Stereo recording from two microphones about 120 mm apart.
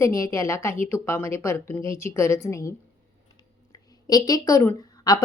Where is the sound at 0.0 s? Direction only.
25° left (ahead or behind).